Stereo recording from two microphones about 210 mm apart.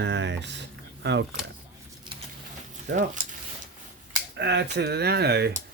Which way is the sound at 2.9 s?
35° right (ahead or behind).